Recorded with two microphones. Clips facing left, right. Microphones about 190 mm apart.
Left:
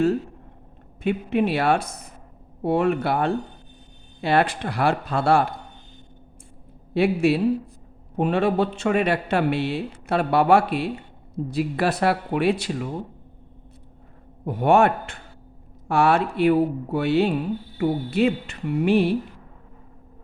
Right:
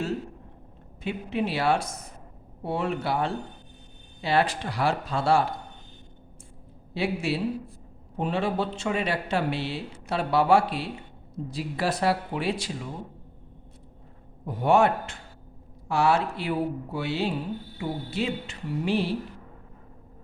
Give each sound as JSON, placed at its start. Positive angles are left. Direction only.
{"t": 1.0, "sound": "speech", "side_deg": 60}
{"t": 6.9, "sound": "speech", "side_deg": 55}
{"t": 14.4, "sound": "speech", "side_deg": 60}